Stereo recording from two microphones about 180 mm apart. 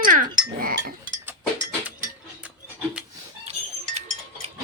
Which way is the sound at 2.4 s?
10° right (ahead or behind).